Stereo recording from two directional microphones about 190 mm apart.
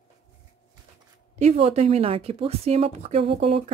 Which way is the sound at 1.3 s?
35° right (ahead or behind).